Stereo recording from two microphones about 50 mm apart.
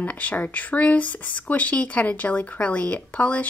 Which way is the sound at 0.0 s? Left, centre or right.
Left.